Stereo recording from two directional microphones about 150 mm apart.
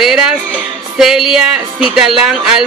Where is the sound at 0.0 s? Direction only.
5° right (ahead or behind).